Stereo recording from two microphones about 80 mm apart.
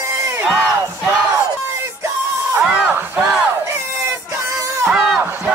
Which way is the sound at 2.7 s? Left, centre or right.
Centre.